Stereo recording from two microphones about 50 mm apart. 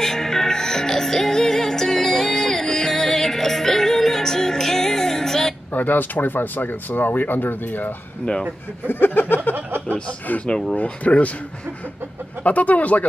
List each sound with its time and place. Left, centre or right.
0.0 s music: centre
5.7 s speech: left
10.4 s speech: centre
10.8 s speech: left
12.4 s speech: left